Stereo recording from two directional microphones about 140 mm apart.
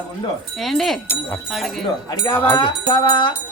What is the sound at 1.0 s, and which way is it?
Speech, 15° left (ahead or behind).